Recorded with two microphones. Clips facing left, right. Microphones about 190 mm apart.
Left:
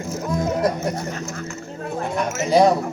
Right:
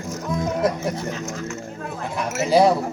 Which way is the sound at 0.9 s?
55° left (ahead or behind).